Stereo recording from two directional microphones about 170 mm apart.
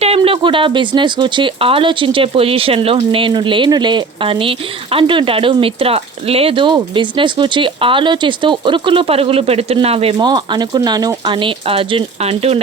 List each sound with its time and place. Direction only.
0.0 s speech: 35° right (ahead or behind)